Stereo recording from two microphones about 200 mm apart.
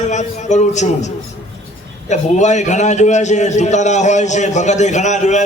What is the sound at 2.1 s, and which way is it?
A man's voice, 35° left (ahead or behind).